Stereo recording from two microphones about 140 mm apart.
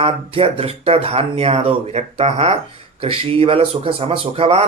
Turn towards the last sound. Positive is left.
turn(degrees=-45)  # may be behind; listen again after turning